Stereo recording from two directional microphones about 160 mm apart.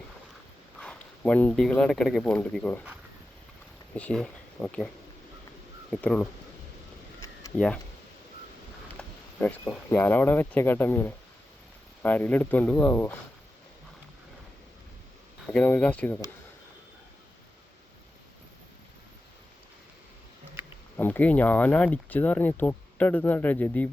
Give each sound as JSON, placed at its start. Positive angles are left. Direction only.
{"t": 0.8, "sound": "speech", "side_deg": 5}
{"t": 3.9, "sound": "speech", "side_deg": 5}
{"t": 5.9, "sound": "speech", "side_deg": 5}
{"t": 7.5, "sound": "speech", "side_deg": 10}
{"t": 9.0, "sound": "speech", "side_deg": 10}
{"t": 15.4, "sound": "speech", "side_deg": 10}
{"t": 20.9, "sound": "speech", "side_deg": 10}